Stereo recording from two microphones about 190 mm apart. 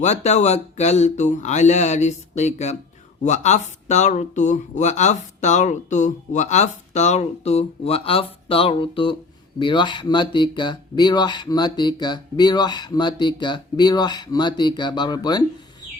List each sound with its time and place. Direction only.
0.0 s speech: 35° left (ahead or behind); by 15.4 s 20° left (ahead or behind)